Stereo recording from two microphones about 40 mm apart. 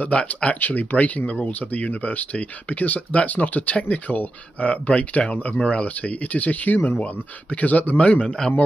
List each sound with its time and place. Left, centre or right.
0.1 s speech: left
0.6 s speech: left
8.0 s speech: left